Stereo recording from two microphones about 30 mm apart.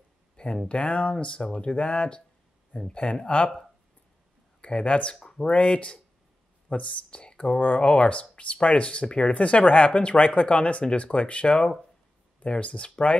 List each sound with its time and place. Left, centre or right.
0.7 s speech: left
4.6 s speech: left
5.2 s speech: left
5.5 s speech: left